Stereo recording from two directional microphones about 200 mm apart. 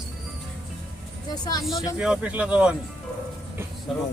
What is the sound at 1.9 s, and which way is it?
Speech, 5° right (ahead or behind).